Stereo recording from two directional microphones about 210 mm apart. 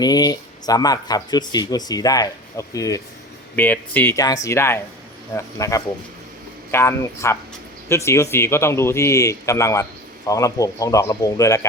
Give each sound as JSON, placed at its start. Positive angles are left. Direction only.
{"t": 0.0, "sound": "speech", "side_deg": 20}